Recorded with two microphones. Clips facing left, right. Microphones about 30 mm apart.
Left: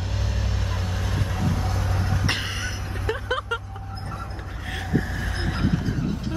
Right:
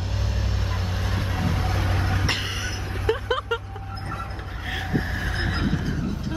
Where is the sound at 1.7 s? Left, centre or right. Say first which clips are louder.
Right 2 dB; right.